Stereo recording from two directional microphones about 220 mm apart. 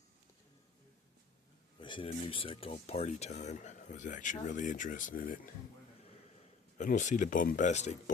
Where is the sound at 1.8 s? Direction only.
20° left (ahead or behind); by 5.4 s 40° left (ahead or behind).